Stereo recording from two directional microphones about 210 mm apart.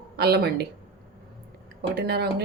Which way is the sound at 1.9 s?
50° right (ahead or behind).